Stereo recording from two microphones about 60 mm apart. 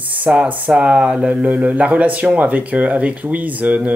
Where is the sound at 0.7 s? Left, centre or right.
Centre.